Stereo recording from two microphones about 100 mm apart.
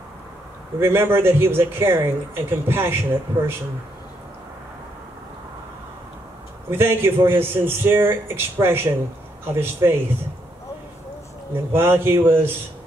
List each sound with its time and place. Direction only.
0.7 s speech: 25° right (ahead or behind)
6.7 s speech: 25° right (ahead or behind)
11.7 s speech: 25° right (ahead or behind)